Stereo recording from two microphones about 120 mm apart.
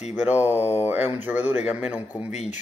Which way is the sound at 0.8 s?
15° right (ahead or behind).